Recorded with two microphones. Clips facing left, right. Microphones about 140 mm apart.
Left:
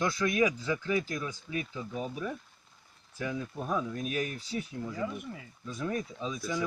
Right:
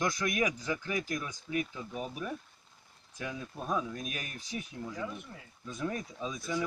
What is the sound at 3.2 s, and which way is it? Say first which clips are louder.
Speech: left 5 dB; 35° left (ahead or behind).